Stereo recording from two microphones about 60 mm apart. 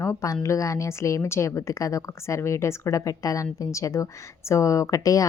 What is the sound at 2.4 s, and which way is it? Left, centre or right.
Speech, left.